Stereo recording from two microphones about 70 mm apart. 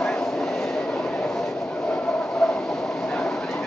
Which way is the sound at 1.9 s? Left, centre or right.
Centre.